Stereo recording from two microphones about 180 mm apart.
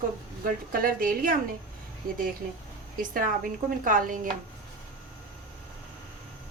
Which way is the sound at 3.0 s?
50° right (ahead or behind).